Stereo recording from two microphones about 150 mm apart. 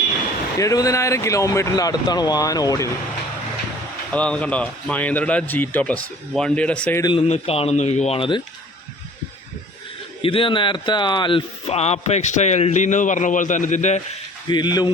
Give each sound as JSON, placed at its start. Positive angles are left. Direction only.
{"t": 0.6, "sound": "speech", "side_deg": 20}
{"t": 4.1, "sound": "speech", "side_deg": 10}
{"t": 7.2, "sound": "speech", "side_deg": 45}
{"t": 10.2, "sound": "speech", "side_deg": 35}
{"t": 14.4, "sound": "speech", "side_deg": 30}